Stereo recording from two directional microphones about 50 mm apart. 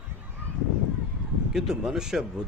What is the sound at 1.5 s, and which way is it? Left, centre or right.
Speech, centre.